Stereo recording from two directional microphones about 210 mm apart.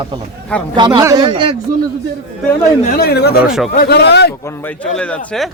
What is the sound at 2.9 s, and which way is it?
Speech, 45° left (ahead or behind).